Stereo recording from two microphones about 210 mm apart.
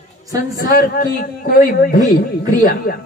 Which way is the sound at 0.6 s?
40° left (ahead or behind).